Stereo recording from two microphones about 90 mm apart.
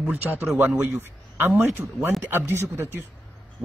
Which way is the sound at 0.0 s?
20° right (ahead or behind).